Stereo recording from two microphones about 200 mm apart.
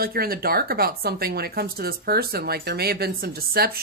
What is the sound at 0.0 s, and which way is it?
Speech, 50° right (ahead or behind).